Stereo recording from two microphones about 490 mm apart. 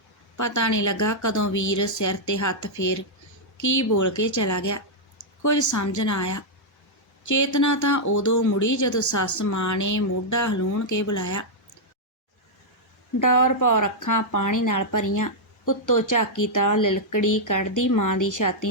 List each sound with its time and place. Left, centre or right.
0.3 s speech: left
13.1 s speech: left